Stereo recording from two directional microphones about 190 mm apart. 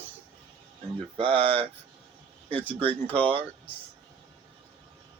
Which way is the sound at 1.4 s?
30° right (ahead or behind).